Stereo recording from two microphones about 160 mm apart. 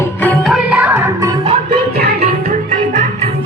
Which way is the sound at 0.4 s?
5° right (ahead or behind).